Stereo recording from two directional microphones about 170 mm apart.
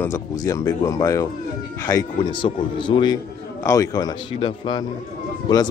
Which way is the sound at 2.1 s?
30° left (ahead or behind).